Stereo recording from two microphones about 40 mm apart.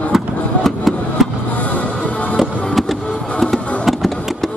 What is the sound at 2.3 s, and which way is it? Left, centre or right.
Music, centre.